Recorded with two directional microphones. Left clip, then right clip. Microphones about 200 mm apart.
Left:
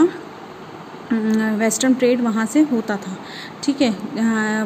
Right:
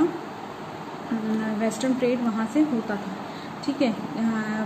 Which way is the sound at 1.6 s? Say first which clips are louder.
Left 7 dB; 60° left (ahead or behind).